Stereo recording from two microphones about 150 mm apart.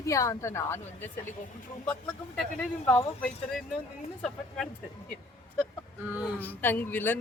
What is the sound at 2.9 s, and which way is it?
Speech, 10° left (ahead or behind).